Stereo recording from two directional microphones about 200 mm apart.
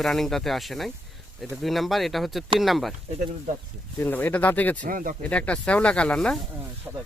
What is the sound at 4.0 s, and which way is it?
Speech, 10° left (ahead or behind).